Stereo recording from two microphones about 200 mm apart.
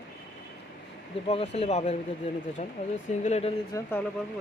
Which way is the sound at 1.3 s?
30° left (ahead or behind).